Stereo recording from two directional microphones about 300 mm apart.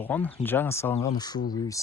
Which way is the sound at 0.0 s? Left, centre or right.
Centre.